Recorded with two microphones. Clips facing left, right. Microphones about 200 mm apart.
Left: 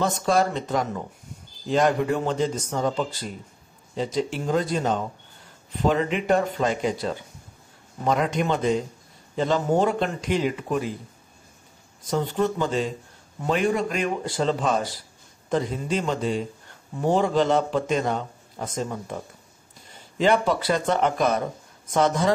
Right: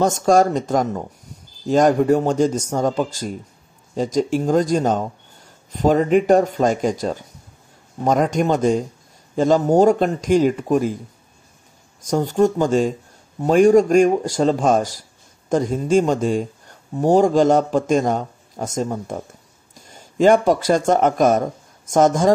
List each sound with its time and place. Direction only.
0.0 s a man's voice: 45° right (ahead or behind)
12.1 s a man's voice: 45° right (ahead or behind)